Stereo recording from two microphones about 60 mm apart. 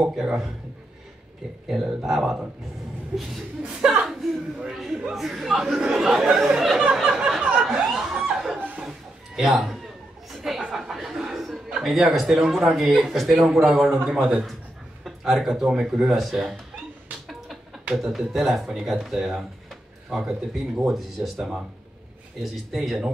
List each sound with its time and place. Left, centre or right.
0.0 s a man's voice: centre
2.0 s a man's voice: centre
3.1 s a sound: right
4.0 s chuckle: centre
4.6 s a man's voice: centre
7.1 s chuckle: centre
8.5 s a sound: right
8.8 s music: centre
10.3 s a sound: centre
10.6 s chuckle: centre
11.8 s a man's voice: centre
17.9 s a man's voice: centre